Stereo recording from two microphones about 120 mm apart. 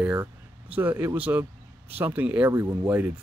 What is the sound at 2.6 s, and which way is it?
Speech, 30° right (ahead or behind).